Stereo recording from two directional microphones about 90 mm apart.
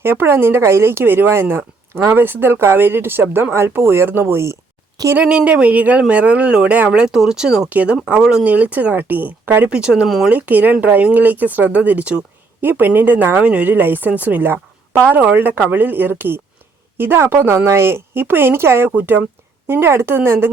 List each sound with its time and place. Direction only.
0.0 s a woman's voice: 25° right (ahead or behind)
5.1 s speech: 15° right (ahead or behind)
10.2 s a woman's voice: 15° right (ahead or behind)